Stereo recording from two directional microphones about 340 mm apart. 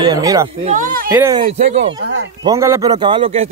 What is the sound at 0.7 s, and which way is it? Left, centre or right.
A man's voice, right.